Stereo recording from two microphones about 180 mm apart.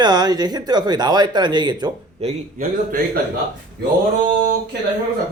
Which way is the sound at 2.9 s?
50° right (ahead or behind).